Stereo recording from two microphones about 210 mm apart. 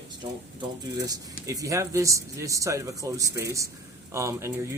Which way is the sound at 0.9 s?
15° right (ahead or behind).